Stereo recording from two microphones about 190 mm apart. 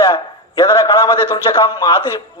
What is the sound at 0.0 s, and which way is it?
A man's voice, 20° left (ahead or behind).